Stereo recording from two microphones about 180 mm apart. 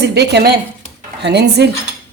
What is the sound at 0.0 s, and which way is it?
A woman's voice, 65° right (ahead or behind).